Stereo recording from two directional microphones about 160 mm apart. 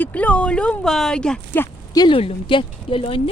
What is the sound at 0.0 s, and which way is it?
Speech, 10° left (ahead or behind).